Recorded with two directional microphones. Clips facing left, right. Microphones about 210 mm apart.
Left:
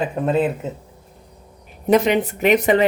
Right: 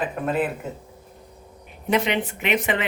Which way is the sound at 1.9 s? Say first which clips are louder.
Left 7 dB; 40° left (ahead or behind).